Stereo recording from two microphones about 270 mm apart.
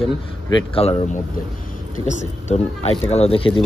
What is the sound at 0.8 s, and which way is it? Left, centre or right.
Speech, left.